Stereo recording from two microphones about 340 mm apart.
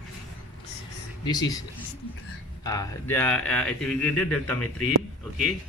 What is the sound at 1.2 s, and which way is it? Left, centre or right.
Speech, centre.